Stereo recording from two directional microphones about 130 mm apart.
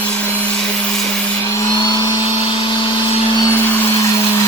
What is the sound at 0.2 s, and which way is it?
Vacuum cleaner, 15° left (ahead or behind).